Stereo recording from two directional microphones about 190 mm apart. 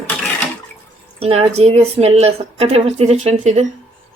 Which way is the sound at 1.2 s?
30° right (ahead or behind).